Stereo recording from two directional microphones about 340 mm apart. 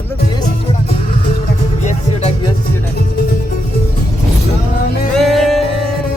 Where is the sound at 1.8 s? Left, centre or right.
Centre.